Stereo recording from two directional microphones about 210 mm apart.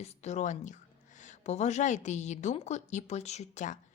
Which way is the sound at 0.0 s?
30° left (ahead or behind).